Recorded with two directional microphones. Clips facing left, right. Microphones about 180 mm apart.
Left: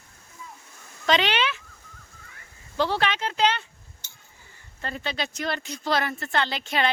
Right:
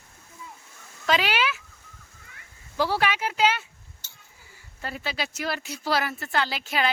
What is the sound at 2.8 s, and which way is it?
Speech, 10° right (ahead or behind).